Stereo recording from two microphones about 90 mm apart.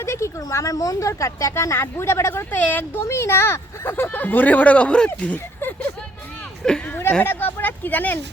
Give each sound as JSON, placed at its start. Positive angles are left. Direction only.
{"t": 0.0, "sound": "speech", "side_deg": 30}
{"t": 5.5, "sound": "vehicle", "side_deg": 25}
{"t": 6.7, "sound": "speech", "side_deg": 10}
{"t": 7.3, "sound": "speech", "side_deg": 25}